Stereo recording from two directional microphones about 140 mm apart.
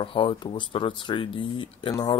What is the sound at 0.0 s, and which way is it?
Speech, 35° left (ahead or behind).